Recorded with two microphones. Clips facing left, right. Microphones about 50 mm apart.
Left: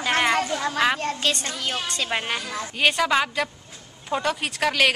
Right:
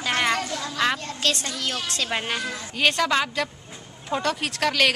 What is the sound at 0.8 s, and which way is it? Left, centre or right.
Speech, left.